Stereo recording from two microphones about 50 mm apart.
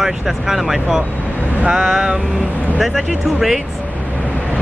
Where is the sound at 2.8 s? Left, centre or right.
Centre.